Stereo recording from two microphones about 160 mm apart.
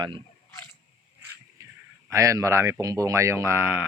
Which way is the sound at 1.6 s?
20° right (ahead or behind).